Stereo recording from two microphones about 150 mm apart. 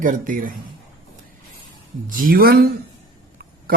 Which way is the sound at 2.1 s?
65° right (ahead or behind).